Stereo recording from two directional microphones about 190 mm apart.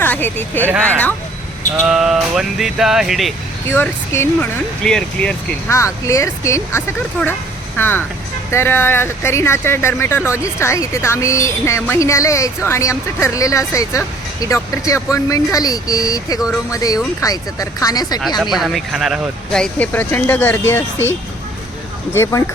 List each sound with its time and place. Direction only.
0.0 s speech: 10° left (ahead or behind)
0.6 s speech: 10° right (ahead or behind)
3.7 s speech: 10° left (ahead or behind)
18.5 s speech: centre (ahead or behind)
22.1 s speech: 15° left (ahead or behind)